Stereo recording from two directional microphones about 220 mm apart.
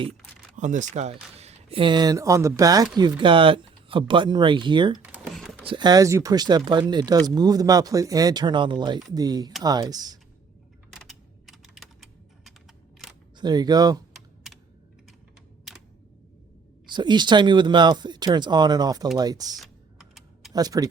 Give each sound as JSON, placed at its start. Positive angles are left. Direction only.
{"t": 0.5, "sound": "speech", "side_deg": -35}
{"t": 5.1, "sound": "computer keyboard", "side_deg": -5}
{"t": 5.6, "sound": "speech", "side_deg": -20}
{"t": 10.9, "sound": "typing", "side_deg": 0}
{"t": 13.4, "sound": "speech", "side_deg": -20}
{"t": 16.9, "sound": "speech", "side_deg": -20}
{"t": 19.5, "sound": "typing", "side_deg": 0}
{"t": 20.5, "sound": "speech", "side_deg": -15}